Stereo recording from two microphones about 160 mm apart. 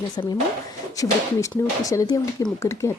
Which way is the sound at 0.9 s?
20° left (ahead or behind).